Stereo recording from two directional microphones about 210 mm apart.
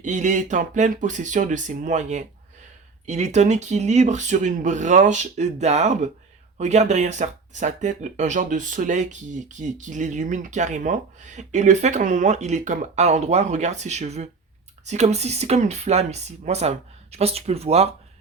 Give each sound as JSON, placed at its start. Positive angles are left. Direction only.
{"t": 0.0, "sound": "speech", "side_deg": -35}